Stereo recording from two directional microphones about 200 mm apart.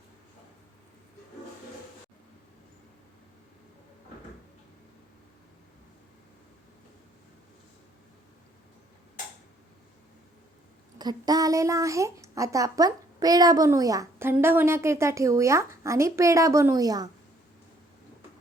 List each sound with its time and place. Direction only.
10.9 s speech: 20° right (ahead or behind)